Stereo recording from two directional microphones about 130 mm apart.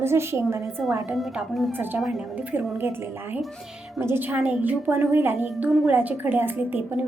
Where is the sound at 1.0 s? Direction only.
5° right (ahead or behind).